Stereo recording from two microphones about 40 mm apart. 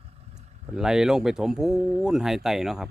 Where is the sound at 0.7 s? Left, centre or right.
Centre.